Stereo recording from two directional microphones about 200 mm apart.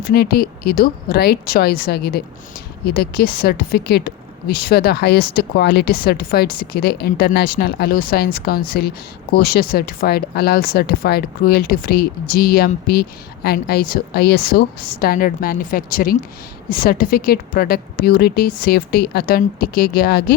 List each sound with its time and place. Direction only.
0.0 s speech: 50° left (ahead or behind)